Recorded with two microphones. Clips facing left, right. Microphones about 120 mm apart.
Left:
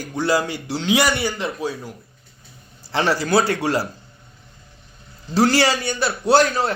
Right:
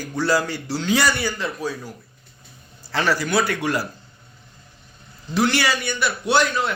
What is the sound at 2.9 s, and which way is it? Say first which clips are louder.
Speech: left 3 dB; 25° left (ahead or behind).